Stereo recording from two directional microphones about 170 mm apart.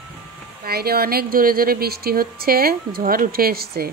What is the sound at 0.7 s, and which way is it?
A woman's voice, 65° right (ahead or behind).